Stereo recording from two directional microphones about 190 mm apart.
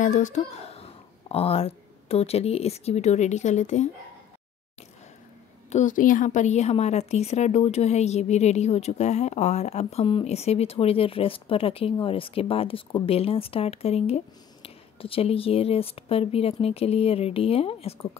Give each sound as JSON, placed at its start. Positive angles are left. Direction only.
{"t": 0.0, "sound": "a woman's voice", "side_deg": 40}
{"t": 5.7, "sound": "a woman's voice", "side_deg": 40}